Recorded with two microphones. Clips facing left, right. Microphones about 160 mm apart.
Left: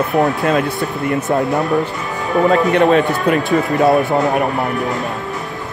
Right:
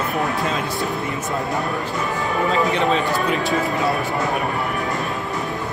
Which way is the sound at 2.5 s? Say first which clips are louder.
Left 7 dB; 70° left (ahead or behind).